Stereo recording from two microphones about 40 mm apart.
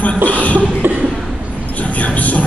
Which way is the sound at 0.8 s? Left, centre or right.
Right.